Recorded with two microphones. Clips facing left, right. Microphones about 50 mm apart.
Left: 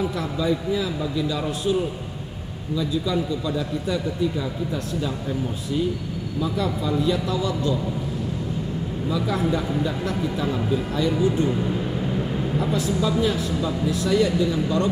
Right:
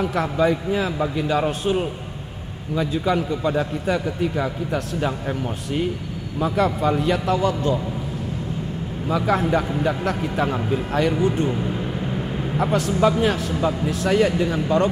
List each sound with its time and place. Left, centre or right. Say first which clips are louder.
0.0 s a man's voice: right 5 dB; right
6.4 s a man's voice: right 6 dB; right
9.1 s a man's voice: right 4 dB; right
11.5 s a sound: left 1 dB; centre
13.2 s a man's voice: right 2 dB; right